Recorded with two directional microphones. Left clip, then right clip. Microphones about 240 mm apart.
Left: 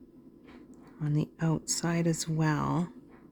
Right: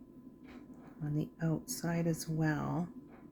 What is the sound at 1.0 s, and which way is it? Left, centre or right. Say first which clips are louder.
Speech: left 6 dB; left.